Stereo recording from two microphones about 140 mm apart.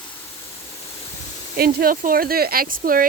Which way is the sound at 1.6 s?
90° right.